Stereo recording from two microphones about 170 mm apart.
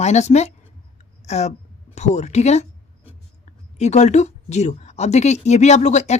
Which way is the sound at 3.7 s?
40° left (ahead or behind).